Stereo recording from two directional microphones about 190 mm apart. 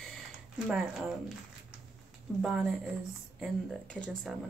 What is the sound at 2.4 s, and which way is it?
Speech, centre (ahead or behind).